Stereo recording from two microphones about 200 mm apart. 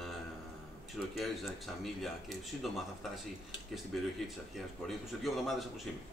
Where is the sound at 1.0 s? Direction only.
Centre (ahead or behind).